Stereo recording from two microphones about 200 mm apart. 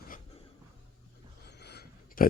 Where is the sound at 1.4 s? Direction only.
55° left (ahead or behind).